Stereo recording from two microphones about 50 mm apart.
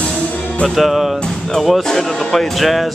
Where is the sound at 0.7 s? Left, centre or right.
Centre.